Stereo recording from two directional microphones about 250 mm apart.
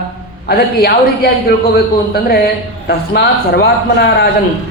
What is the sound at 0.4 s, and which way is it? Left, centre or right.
A man's voice, left.